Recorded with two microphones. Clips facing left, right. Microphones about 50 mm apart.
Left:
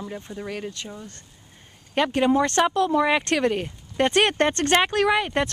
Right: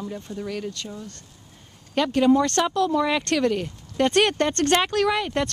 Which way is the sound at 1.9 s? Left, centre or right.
Left.